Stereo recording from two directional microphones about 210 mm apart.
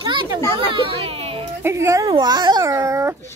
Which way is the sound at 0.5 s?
25° right (ahead or behind).